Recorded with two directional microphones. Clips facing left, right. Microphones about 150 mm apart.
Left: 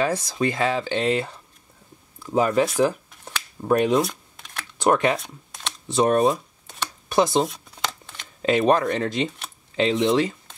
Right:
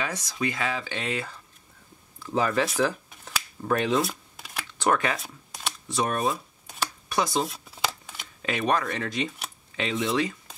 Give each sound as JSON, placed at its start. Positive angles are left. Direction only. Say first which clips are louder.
{"t": 0.0, "sound": "speech", "louder": "left 7 dB", "side_deg": 30}
{"t": 3.6, "sound": "speech", "louder": "left 5 dB", "side_deg": 20}
{"t": 4.0, "sound": "shuffling cards", "louder": "left 3 dB", "side_deg": -5}
{"t": 4.8, "sound": "speech", "louder": "left 5 dB", "side_deg": 20}
{"t": 5.2, "sound": "a sound", "louder": "even", "side_deg": 0}
{"t": 5.9, "sound": "speech", "louder": "left 8 dB", "side_deg": 25}
{"t": 6.3, "sound": "shuffling cards", "louder": "left 4 dB", "side_deg": 0}
{"t": 7.1, "sound": "speech", "louder": "left 7 dB", "side_deg": 25}
{"t": 7.4, "sound": "shuffling cards", "louder": "left 1 dB", "side_deg": 0}
{"t": 8.4, "sound": "speech", "louder": "left 7 dB", "side_deg": 30}